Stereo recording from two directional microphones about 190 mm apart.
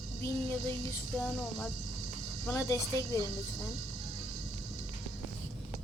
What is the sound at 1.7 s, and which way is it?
Music, 40° right (ahead or behind).